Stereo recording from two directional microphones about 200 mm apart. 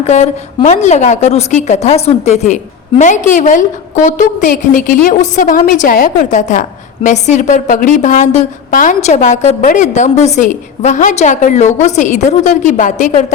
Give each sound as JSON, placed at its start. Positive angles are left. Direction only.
{"t": 0.1, "sound": "a woman's voice", "side_deg": 35}